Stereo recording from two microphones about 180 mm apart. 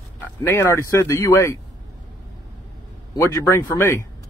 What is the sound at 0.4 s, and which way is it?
A man's voice, 15° left (ahead or behind).